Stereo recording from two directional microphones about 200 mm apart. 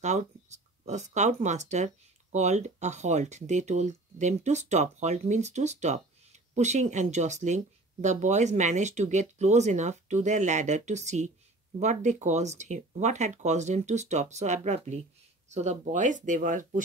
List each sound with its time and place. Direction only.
0.0 s speech: 35° right (ahead or behind)